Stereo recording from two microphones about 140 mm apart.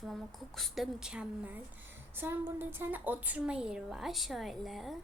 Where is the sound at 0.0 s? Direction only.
Centre (ahead or behind).